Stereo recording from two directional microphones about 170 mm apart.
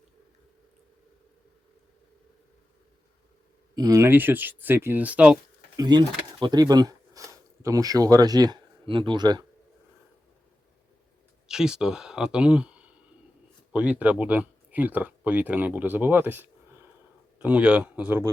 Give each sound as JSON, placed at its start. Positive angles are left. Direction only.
{"t": 3.8, "sound": "speech", "side_deg": -20}
{"t": 5.7, "sound": "speech", "side_deg": -25}
{"t": 11.4, "sound": "speech", "side_deg": -5}
{"t": 14.0, "sound": "speech", "side_deg": -10}